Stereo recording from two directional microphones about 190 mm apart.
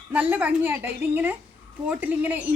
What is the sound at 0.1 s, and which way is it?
A woman's voice, 5° right (ahead or behind).